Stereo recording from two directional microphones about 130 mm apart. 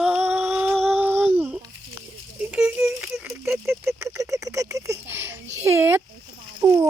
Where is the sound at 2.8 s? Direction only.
10° right (ahead or behind).